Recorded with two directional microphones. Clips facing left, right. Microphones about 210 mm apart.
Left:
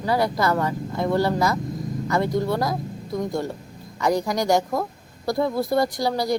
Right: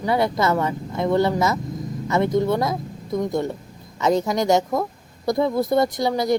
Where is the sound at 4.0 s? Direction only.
20° right (ahead or behind).